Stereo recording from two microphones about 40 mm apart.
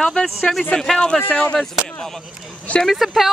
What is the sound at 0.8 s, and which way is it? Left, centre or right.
Speech, centre.